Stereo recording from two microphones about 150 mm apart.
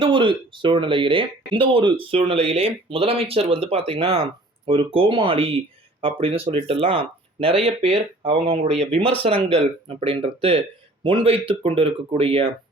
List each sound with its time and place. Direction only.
0.0 s speech: 35° right (ahead or behind)